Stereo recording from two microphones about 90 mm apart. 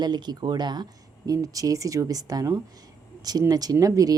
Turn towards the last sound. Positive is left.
turn(degrees=-40)  # may be behind; listen again after turning